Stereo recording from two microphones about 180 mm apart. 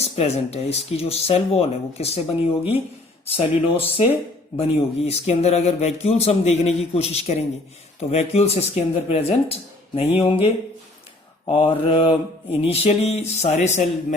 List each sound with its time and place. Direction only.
0.0 s speech: 35° left (ahead or behind)
3.2 s speech: 30° left (ahead or behind)